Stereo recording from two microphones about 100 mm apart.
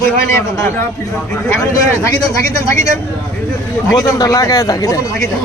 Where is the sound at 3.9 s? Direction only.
35° left (ahead or behind).